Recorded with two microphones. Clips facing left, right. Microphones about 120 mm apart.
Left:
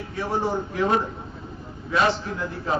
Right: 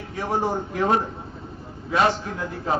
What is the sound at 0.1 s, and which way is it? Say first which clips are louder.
Speech: right 1 dB; 45° right (ahead or behind).